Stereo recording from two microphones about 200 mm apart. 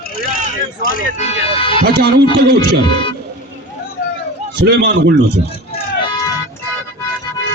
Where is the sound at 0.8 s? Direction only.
45° left (ahead or behind).